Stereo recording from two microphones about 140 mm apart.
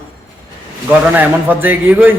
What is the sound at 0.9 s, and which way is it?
A man's voice, 10° right (ahead or behind).